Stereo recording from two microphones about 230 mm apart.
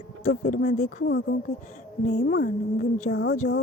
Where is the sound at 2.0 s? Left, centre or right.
Left.